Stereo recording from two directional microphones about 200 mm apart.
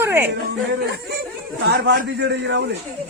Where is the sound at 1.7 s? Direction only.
60° right (ahead or behind).